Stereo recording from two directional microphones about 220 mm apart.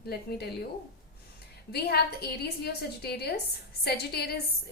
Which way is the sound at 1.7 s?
45° left (ahead or behind).